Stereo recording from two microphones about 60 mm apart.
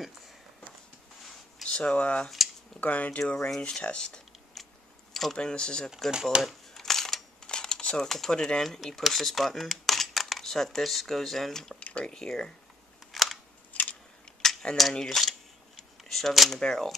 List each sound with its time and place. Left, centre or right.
1.6 s speech: centre
3.4 s speech: centre
4.6 s biting: centre
5.1 s a sound: centre
5.4 s speech: centre
6.4 s a sound: centre
8.1 s speech: centre
11.8 s speech: centre
13.1 s camera: centre
13.7 s a sound: left
14.2 s a sound: centre
14.8 s speech: centre